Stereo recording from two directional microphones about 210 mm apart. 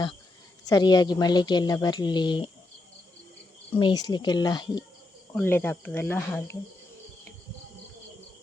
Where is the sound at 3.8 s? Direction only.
20° left (ahead or behind).